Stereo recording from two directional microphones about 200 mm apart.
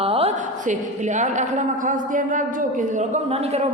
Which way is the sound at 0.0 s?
30° right (ahead or behind).